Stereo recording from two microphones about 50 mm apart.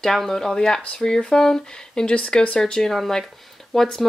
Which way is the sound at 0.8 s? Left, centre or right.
Left.